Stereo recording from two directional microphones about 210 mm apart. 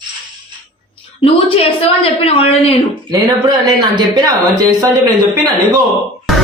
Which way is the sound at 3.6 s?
20° right (ahead or behind).